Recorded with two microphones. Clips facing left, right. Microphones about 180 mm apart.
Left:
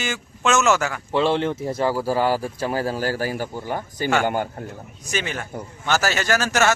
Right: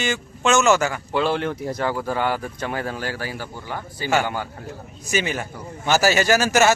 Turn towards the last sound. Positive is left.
turn(degrees=-10)  # may be behind; listen again after turning